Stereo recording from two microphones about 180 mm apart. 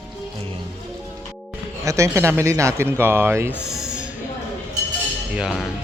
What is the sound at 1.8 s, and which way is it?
Speech, 15° right (ahead or behind).